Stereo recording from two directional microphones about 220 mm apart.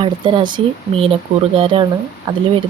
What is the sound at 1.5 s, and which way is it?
Speech, 25° right (ahead or behind).